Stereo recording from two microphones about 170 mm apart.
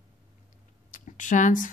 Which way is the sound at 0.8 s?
50° left (ahead or behind).